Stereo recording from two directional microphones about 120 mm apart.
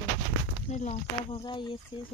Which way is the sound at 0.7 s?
80° left.